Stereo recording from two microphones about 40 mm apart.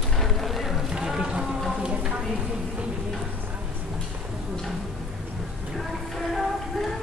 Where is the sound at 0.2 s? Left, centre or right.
Centre.